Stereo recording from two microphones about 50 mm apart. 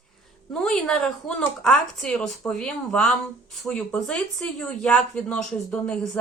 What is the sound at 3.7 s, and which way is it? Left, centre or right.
Speech, centre.